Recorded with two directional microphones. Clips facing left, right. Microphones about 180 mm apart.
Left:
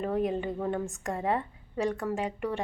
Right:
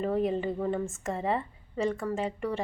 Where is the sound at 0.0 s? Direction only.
Centre (ahead or behind).